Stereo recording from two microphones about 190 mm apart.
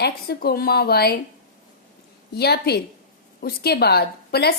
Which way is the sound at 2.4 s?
60° left (ahead or behind).